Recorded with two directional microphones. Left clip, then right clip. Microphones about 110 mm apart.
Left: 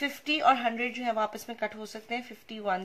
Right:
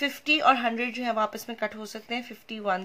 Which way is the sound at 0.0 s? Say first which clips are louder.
Right 3 dB; 35° right (ahead or behind).